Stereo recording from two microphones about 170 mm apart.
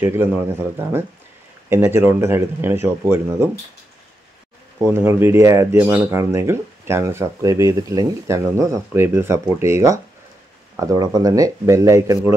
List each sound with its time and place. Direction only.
0.0 s speech: 15° right (ahead or behind)
4.7 s speech: 15° right (ahead or behind)